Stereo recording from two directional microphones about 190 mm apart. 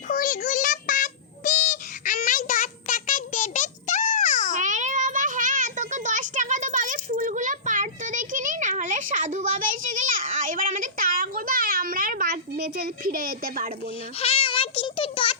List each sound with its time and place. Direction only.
0.1 s a sound: 45° left (ahead or behind)
4.5 s child singing: 40° right (ahead or behind)
14.2 s child singing: 30° left (ahead or behind)